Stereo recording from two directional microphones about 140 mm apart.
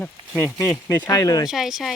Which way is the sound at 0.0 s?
15° left (ahead or behind).